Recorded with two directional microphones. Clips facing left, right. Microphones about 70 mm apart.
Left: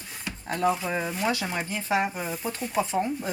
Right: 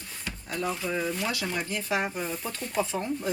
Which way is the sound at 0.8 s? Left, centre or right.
Left.